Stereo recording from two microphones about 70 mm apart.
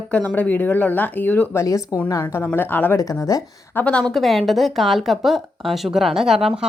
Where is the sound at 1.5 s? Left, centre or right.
Left.